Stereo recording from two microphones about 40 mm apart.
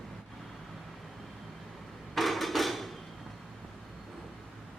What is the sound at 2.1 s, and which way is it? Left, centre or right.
Hammer, centre.